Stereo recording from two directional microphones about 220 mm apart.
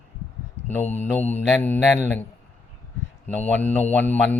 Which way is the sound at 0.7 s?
10° left (ahead or behind).